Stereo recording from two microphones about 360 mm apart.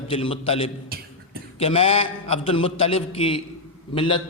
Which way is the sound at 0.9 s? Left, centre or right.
Right.